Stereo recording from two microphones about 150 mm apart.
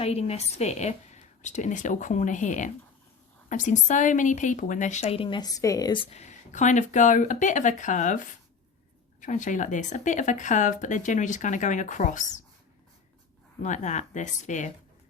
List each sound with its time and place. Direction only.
0.0 s speech: 45° left (ahead or behind)
6.1 s speech: 50° left (ahead or behind)
13.6 s speech: 55° left (ahead or behind)